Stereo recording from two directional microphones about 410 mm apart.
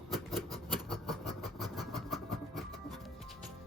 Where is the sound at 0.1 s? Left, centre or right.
Centre.